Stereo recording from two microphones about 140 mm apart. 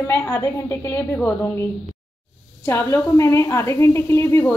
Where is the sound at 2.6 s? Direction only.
20° left (ahead or behind).